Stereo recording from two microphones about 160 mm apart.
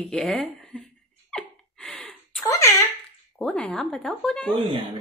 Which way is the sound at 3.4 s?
5° left (ahead or behind).